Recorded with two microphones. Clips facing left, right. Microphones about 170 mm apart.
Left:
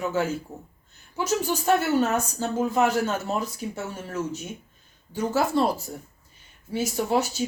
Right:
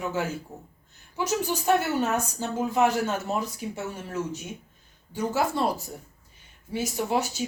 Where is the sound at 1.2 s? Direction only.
15° right (ahead or behind).